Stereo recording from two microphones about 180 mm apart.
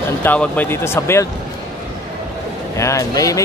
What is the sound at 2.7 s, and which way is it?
Speech, 15° left (ahead or behind).